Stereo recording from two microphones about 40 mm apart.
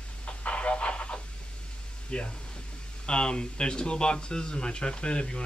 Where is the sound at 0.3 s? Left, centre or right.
Left.